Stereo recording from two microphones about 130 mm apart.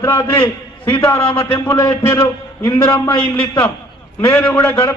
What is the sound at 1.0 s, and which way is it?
A man's voice, 15° left (ahead or behind).